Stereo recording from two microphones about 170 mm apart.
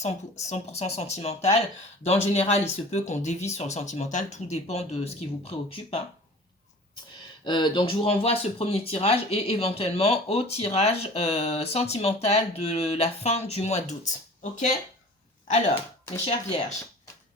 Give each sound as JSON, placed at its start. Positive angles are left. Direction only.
{"t": 0.0, "sound": "speech", "side_deg": 40}
{"t": 7.4, "sound": "speech", "side_deg": 25}
{"t": 16.1, "sound": "speech", "side_deg": 40}